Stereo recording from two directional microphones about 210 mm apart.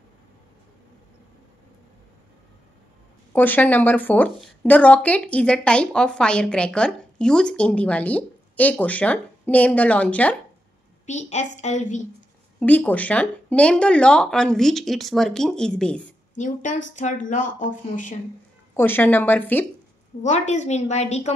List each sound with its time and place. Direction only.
3.3 s speech: 10° left (ahead or behind)
11.1 s speech: 35° left (ahead or behind)
12.5 s speech: 5° left (ahead or behind)
16.3 s speech: 35° left (ahead or behind)
18.8 s speech: 10° left (ahead or behind)
20.2 s speech: 35° left (ahead or behind)